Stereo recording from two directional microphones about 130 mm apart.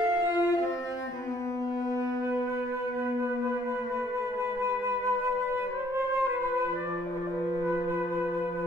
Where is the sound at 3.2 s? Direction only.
20° right (ahead or behind).